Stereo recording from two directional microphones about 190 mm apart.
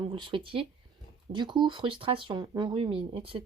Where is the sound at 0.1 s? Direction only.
25° right (ahead or behind).